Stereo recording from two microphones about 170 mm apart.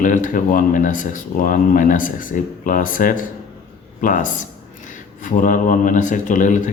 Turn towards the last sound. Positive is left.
turn(degrees=45)  # may be behind; listen again after turning